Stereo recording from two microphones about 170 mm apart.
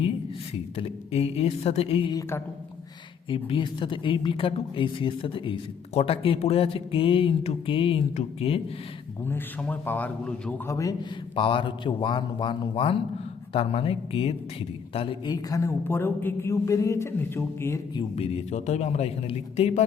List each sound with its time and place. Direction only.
0.8 s a woman's voice: 35° left (ahead or behind)
3.2 s a woman's voice: 30° left (ahead or behind)
9.2 s a woman's voice: 10° left (ahead or behind)
10.7 s speech: 20° left (ahead or behind)
11.3 s a woman's voice: 30° left (ahead or behind); by 17.7 s 15° left (ahead or behind)
17.9 s a woman's voice: 35° left (ahead or behind)